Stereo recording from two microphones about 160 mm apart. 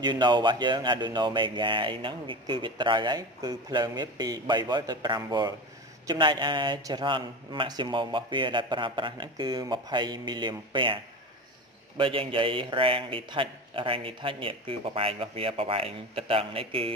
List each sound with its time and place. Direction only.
0.0 s speech: 30° right (ahead or behind)
12.0 s a man's voice: 35° right (ahead or behind)